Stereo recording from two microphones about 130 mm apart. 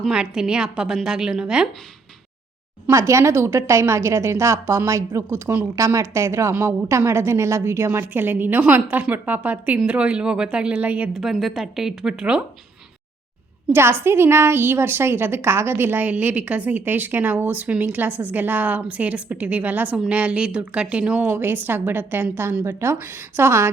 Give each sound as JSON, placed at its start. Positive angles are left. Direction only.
{"t": 0.0, "sound": "a woman's voice", "side_deg": -5}
{"t": 2.8, "sound": "a woman's voice", "side_deg": -20}
{"t": 13.7, "sound": "a woman's voice", "side_deg": -20}